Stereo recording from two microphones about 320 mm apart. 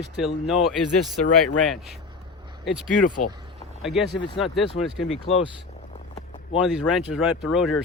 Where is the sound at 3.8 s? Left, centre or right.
Centre.